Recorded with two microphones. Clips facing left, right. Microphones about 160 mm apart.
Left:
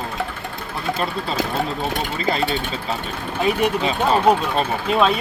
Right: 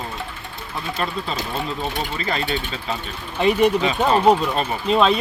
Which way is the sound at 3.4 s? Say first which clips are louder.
Right 3 dB; 5° left (ahead or behind).